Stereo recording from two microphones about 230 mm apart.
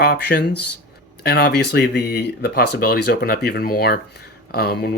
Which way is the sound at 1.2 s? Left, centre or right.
Left.